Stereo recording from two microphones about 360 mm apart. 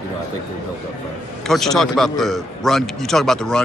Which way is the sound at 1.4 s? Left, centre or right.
Centre.